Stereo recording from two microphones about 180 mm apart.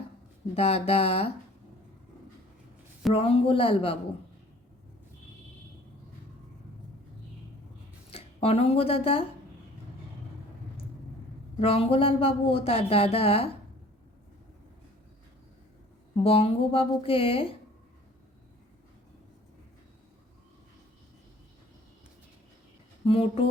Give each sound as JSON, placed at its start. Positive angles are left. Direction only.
{"t": 0.5, "sound": "speech", "side_deg": 35}
{"t": 3.1, "sound": "speech", "side_deg": 35}
{"t": 8.1, "sound": "speech", "side_deg": 35}
{"t": 11.6, "sound": "speech", "side_deg": 35}
{"t": 16.2, "sound": "speech", "side_deg": 30}
{"t": 23.0, "sound": "speech", "side_deg": 30}